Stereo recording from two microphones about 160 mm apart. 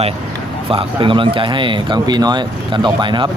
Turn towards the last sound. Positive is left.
turn(degrees=-30)  # may be behind; listen again after turning